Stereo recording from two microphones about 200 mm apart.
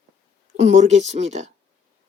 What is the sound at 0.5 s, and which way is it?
Speech, 35° right (ahead or behind).